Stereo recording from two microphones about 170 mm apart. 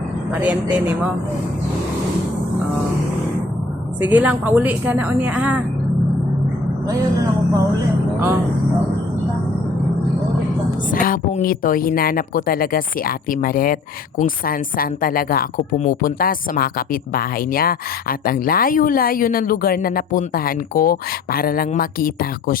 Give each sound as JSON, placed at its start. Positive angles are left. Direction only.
{"t": 0.3, "sound": "a woman's voice", "side_deg": -10}
{"t": 4.0, "sound": "a woman's voice", "side_deg": -10}
{"t": 10.9, "sound": "speech", "side_deg": 55}